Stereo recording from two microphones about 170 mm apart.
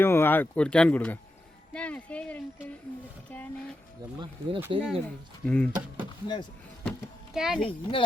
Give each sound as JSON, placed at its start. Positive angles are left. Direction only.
{"t": 0.0, "sound": "speech", "side_deg": 15}
{"t": 4.2, "sound": "speech", "side_deg": -30}
{"t": 4.8, "sound": "speech", "side_deg": 5}
{"t": 6.2, "sound": "speech", "side_deg": 25}
{"t": 7.3, "sound": "speech", "side_deg": -5}
{"t": 7.6, "sound": "speech", "side_deg": 30}